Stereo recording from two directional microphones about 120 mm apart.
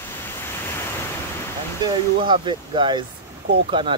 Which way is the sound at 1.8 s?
40° right (ahead or behind).